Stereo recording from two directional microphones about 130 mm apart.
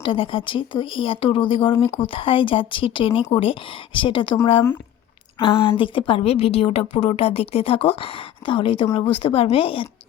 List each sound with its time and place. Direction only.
0.0 s a woman's voice: 45° left (ahead or behind)
5.4 s a woman's voice: 40° left (ahead or behind)